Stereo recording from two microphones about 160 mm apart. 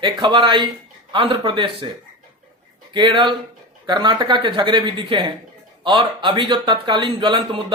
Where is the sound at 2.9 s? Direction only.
30° right (ahead or behind).